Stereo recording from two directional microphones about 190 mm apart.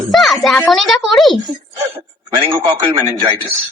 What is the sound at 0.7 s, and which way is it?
Speech, centre (ahead or behind).